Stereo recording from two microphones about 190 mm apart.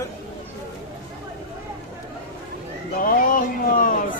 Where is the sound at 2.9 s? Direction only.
45° left (ahead or behind).